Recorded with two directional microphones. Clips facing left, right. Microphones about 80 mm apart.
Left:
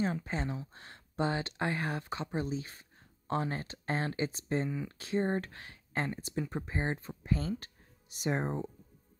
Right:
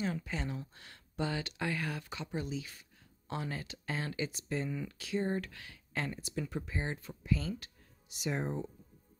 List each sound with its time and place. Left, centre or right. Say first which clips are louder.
0.0 s speech: left 3 dB; left